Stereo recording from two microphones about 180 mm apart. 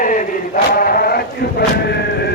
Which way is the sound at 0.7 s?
55° left (ahead or behind).